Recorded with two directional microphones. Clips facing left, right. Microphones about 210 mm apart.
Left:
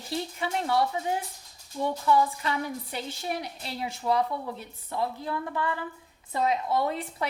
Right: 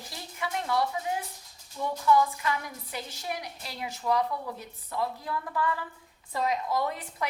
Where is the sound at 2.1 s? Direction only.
30° left (ahead or behind).